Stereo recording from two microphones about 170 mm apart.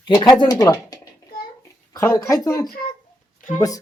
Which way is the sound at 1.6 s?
20° left (ahead or behind).